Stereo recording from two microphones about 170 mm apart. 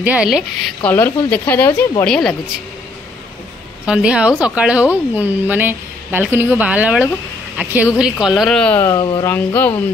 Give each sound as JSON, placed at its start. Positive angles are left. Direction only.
{"t": 0.0, "sound": "a woman's voice", "side_deg": -5}
{"t": 0.8, "sound": "speech", "side_deg": 10}
{"t": 3.8, "sound": "a woman's voice", "side_deg": -5}
{"t": 8.7, "sound": "speech", "side_deg": 20}